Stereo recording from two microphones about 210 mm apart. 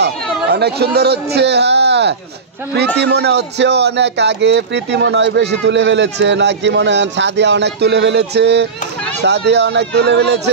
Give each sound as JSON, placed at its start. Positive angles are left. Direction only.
{"t": 0.5, "sound": "a man's voice", "side_deg": -50}